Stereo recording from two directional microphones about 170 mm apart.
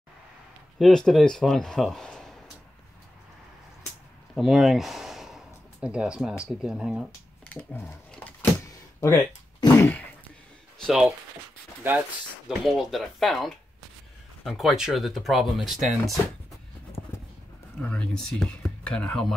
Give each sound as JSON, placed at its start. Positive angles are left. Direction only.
{"t": 0.7, "sound": "speech", "side_deg": 0}
{"t": 4.4, "sound": "speech", "side_deg": 0}
{"t": 7.4, "sound": "speech", "side_deg": 10}
{"t": 10.8, "sound": "speech", "side_deg": -5}
{"t": 12.4, "sound": "speech", "side_deg": 0}
{"t": 17.8, "sound": "speech", "side_deg": 5}